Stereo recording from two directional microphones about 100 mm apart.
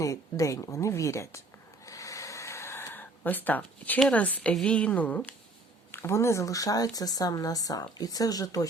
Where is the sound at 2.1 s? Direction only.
30° left (ahead or behind).